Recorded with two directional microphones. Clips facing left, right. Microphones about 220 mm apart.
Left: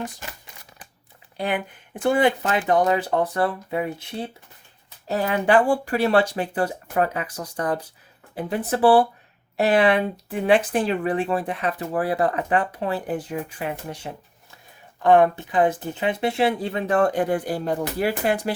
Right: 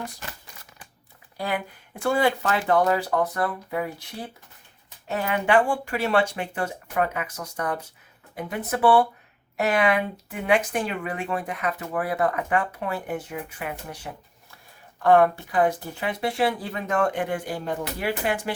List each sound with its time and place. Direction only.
1.4 s speech: 20° left (ahead or behind)
5.0 s speech: 35° left (ahead or behind)